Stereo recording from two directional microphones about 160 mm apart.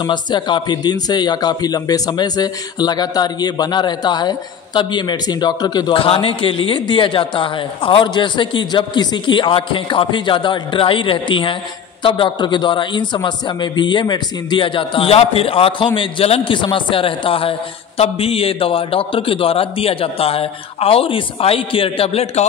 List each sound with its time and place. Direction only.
0.0 s a man's voice: 30° left (ahead or behind)